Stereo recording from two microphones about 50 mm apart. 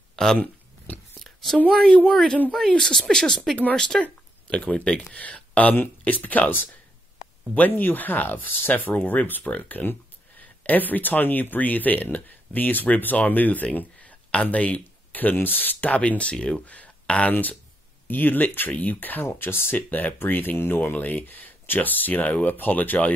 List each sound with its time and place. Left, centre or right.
0.1 s a sound: centre
1.7 s speech: centre; by 6.6 s left
7.8 s speech: left
13.7 s a sound: left
15.3 s speech: left
17.3 s speech: left